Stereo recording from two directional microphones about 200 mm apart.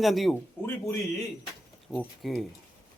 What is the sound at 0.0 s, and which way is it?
Speech, centre (ahead or behind).